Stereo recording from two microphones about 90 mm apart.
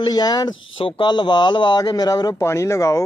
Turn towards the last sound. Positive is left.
turn(degrees=35)  # may be behind; listen again after turning